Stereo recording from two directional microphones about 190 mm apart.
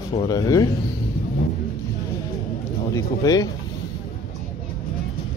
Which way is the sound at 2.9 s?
20° left (ahead or behind).